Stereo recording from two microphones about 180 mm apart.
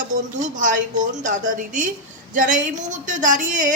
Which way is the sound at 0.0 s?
45° right (ahead or behind).